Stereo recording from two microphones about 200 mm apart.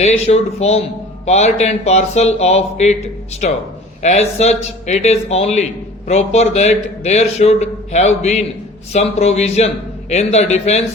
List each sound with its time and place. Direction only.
0.0 s a man's voice: 35° left (ahead or behind)